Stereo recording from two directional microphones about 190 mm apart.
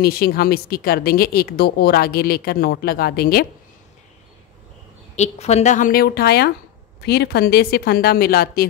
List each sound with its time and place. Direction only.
0.0 s speech: 55° left (ahead or behind)
5.1 s speech: 35° left (ahead or behind); by 8.6 s 55° left (ahead or behind)